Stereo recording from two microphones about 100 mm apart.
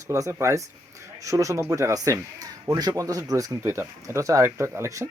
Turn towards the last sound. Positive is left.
turn(degrees=-30)  # may be behind; listen again after turning